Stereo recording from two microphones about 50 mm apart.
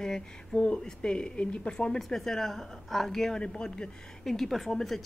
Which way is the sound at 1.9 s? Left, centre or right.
Centre.